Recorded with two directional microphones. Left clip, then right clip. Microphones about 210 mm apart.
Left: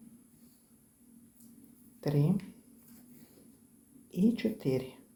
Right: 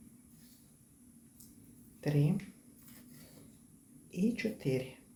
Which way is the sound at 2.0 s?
25° left (ahead or behind).